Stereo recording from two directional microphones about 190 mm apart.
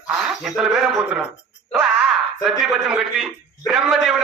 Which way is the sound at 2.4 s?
Centre (ahead or behind).